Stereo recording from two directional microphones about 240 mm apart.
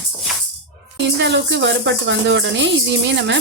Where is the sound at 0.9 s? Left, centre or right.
Right.